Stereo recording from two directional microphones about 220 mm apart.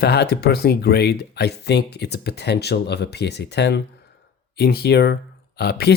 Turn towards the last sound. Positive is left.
turn(degrees=45)  # may be behind; listen again after turning